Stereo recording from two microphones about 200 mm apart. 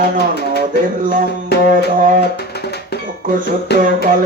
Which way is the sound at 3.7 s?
55° left (ahead or behind).